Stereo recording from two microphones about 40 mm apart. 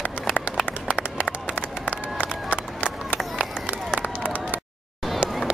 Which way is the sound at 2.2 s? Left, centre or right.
Right.